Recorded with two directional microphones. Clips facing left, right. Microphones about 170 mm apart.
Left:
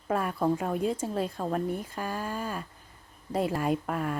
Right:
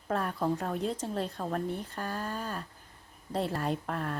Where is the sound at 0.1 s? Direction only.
10° left (ahead or behind).